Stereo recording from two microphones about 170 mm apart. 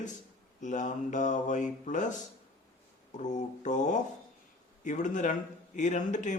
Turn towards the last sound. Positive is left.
turn(degrees=45)  # may be behind; listen again after turning